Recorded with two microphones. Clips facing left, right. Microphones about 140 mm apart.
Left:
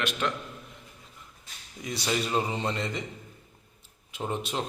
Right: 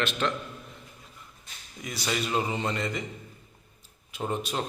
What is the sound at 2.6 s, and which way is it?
Speech, 30° left (ahead or behind).